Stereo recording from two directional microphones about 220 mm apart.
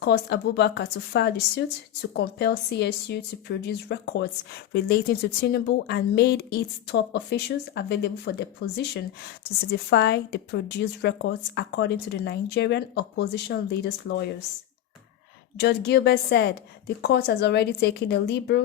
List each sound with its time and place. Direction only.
0.0 s speech: 50° left (ahead or behind)
9.9 s speech: 50° left (ahead or behind)
15.5 s speech: 50° left (ahead or behind)